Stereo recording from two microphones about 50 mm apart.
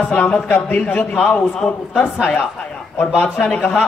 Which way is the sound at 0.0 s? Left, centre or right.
Centre.